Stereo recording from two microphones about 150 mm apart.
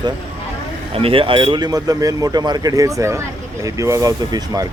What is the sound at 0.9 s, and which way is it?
Speech, 40° right (ahead or behind).